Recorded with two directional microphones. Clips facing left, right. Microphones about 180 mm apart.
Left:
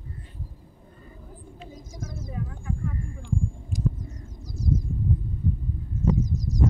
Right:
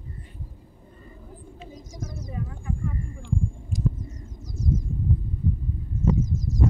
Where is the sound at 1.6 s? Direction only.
Centre (ahead or behind).